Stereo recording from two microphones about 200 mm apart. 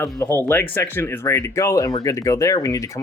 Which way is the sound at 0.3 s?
10° left (ahead or behind).